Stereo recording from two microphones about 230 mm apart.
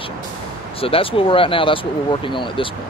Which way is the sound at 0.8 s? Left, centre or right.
Left.